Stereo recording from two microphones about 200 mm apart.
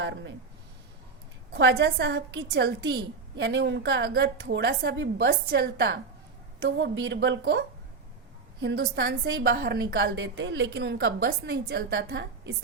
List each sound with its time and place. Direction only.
0.0 s speech: 65° right (ahead or behind)
1.5 s a woman's voice: 60° right (ahead or behind)
8.6 s a woman's voice: 55° right (ahead or behind)